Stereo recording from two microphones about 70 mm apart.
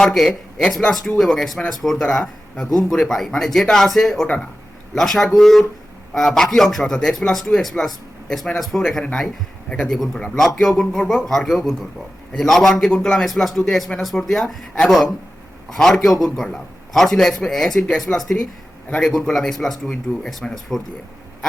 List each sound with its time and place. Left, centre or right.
0.0 s a man's voice: centre
18.9 s a man's voice: centre
19.1 s speech: centre